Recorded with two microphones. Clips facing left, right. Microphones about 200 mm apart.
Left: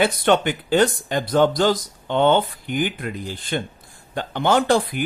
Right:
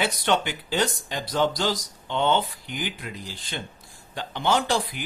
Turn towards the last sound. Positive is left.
turn(degrees=55)  # may be behind; listen again after turning